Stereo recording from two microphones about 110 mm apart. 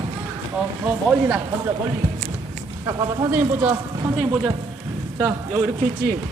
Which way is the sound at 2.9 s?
30° right (ahead or behind).